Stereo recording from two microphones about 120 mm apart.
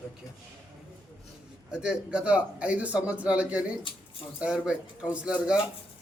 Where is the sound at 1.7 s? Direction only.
5° right (ahead or behind).